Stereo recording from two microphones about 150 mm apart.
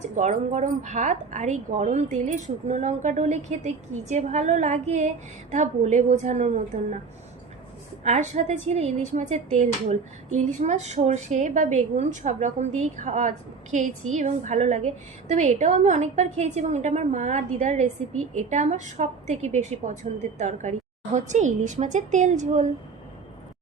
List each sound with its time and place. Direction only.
0.0 s a woman's voice: 50° right (ahead or behind)
8.0 s a woman's voice: 50° right (ahead or behind)